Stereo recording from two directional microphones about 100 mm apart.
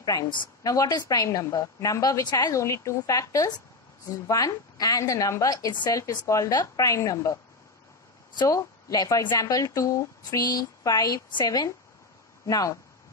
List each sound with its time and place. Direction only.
0.0 s a woman's voice: 35° left (ahead or behind)
8.4 s speech: 35° left (ahead or behind)